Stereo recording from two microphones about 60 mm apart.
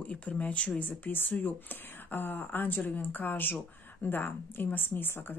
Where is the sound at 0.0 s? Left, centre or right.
Left.